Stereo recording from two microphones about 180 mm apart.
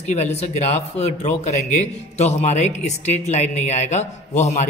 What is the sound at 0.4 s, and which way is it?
Speech, 35° left (ahead or behind).